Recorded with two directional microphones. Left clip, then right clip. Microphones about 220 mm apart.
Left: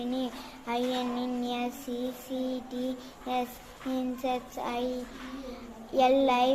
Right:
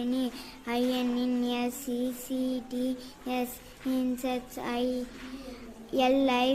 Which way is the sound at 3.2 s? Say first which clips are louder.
Left 2 dB; 55° right (ahead or behind).